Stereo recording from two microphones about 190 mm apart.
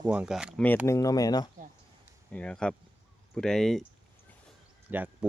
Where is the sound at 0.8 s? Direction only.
15° left (ahead or behind).